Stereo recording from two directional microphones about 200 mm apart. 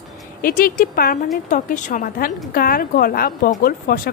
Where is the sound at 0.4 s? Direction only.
45° left (ahead or behind).